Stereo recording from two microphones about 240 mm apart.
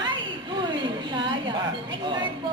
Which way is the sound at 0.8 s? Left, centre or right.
Centre.